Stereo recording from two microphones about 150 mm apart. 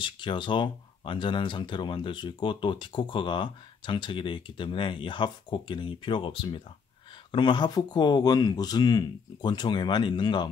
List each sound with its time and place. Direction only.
0.0 s speech: 30° left (ahead or behind)